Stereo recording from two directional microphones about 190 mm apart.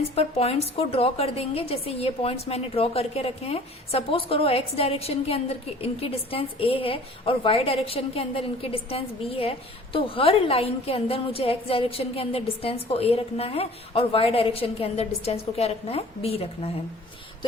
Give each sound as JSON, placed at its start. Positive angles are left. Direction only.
{"t": 0.2, "sound": "a woman's voice", "side_deg": 30}